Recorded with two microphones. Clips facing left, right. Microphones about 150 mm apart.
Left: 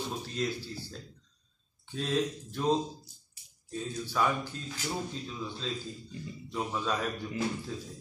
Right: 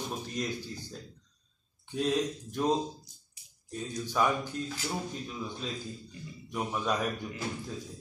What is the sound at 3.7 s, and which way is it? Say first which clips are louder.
Speech: right 1 dB; 15° right (ahead or behind).